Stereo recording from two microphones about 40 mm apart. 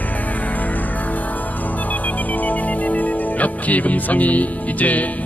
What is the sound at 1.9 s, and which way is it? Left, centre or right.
Music, left.